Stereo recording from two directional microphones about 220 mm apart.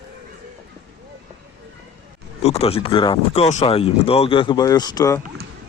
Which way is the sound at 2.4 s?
30° left (ahead or behind).